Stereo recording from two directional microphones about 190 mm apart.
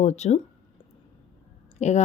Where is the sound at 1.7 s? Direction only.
35° left (ahead or behind).